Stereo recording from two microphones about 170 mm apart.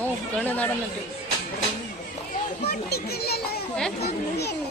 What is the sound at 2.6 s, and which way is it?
A child's voice, 70° left (ahead or behind).